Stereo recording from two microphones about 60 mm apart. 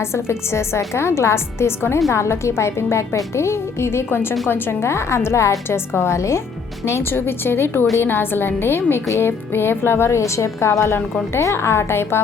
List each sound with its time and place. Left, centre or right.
0.0 s a woman's voice: left